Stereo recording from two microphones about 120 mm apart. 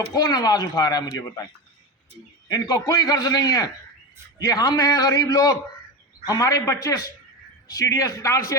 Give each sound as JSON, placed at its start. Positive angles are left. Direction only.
{"t": 0.1, "sound": "a man's voice", "side_deg": 35}
{"t": 2.5, "sound": "a man's voice", "side_deg": 30}